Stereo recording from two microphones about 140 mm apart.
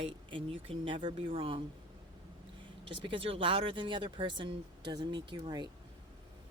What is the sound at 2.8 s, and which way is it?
A woman's voice, 40° right (ahead or behind).